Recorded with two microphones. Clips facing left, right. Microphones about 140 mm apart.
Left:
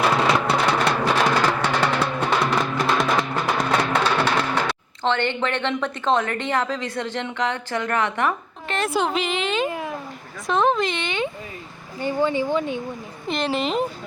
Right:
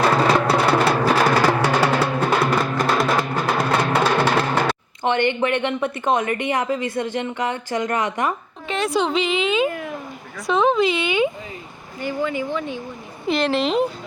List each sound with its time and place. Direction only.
0.3 s music: 5° right (ahead or behind)
8.6 s a woman's voice: centre (ahead or behind)
11.9 s speech: 30° left (ahead or behind)
13.2 s a woman's voice: centre (ahead or behind)